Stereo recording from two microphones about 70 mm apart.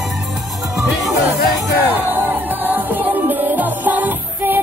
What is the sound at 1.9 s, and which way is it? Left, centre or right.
Music, right.